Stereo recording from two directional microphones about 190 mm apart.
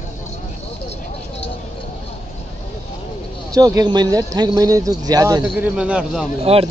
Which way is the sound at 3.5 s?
20° right (ahead or behind).